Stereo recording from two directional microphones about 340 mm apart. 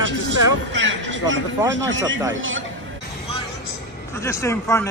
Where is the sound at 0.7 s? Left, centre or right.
Right.